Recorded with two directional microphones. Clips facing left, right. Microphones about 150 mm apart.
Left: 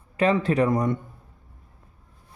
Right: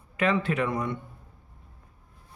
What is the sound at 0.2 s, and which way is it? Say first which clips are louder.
Speech: left 5 dB; 35° left (ahead or behind).